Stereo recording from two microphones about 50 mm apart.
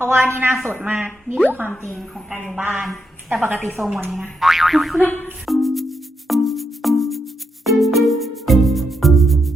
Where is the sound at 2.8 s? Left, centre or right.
Centre.